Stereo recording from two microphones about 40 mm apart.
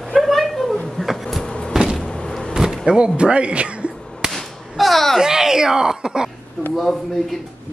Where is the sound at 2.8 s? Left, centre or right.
Right.